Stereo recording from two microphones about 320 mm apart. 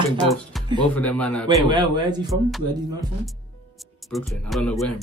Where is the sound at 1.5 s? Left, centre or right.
Centre.